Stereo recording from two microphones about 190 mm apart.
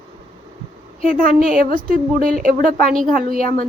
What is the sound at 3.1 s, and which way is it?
Speech, 45° right (ahead or behind).